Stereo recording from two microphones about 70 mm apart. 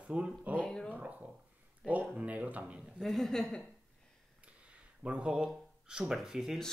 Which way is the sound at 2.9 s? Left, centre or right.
Centre.